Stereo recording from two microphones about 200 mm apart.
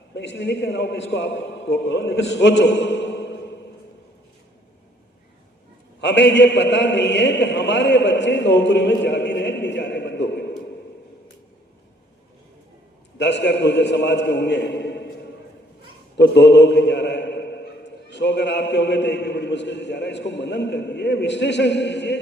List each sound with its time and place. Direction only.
0.1 s a man's voice: 60° left (ahead or behind)
6.0 s a man's voice: 60° left (ahead or behind)
13.1 s a man's voice: 60° left (ahead or behind)
16.1 s a man's voice: 60° left (ahead or behind)